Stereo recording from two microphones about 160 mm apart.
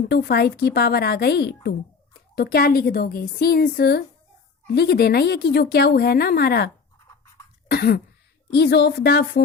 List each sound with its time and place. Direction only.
0.1 s speech: 85° left
2.3 s a woman's voice: 80° left
7.7 s a woman's voice: 80° left
8.5 s speech: 90° left